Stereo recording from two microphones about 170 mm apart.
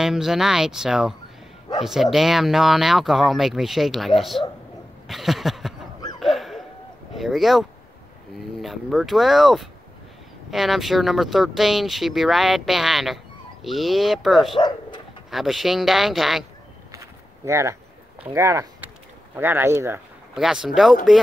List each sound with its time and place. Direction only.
0.0 s speech: 5° right (ahead or behind)
5.0 s a sound: centre (ahead or behind)
7.2 s speech: centre (ahead or behind)
16.9 s a sound: 15° right (ahead or behind)
18.2 s speech: 15° right (ahead or behind)
20.3 s speech: centre (ahead or behind)